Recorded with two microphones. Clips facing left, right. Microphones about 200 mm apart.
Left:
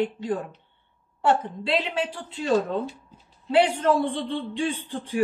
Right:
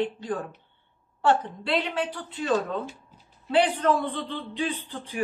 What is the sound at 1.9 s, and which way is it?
A woman's voice, 25° left (ahead or behind).